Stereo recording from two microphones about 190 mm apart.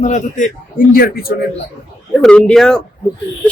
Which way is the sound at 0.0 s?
40° left (ahead or behind).